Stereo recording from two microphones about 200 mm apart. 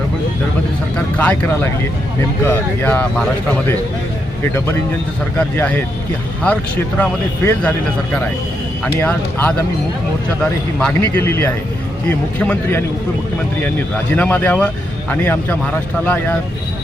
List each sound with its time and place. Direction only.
0.9 s speech: 5° left (ahead or behind)
4.5 s speech: 10° left (ahead or behind)